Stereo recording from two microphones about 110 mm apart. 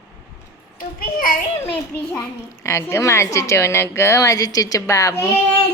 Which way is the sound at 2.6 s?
25° left (ahead or behind).